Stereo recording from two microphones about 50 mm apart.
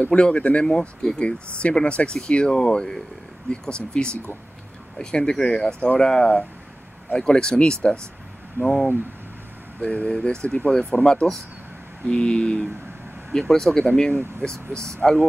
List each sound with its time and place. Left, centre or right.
0.0 s speech: left
9.8 s speech: left
13.3 s speech: centre
15.0 s speech: centre